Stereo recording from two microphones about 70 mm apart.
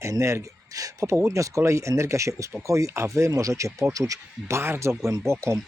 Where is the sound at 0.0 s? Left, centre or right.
Right.